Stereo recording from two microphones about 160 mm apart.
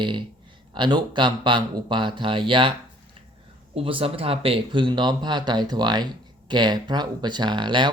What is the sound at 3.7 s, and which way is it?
Speech, 35° right (ahead or behind).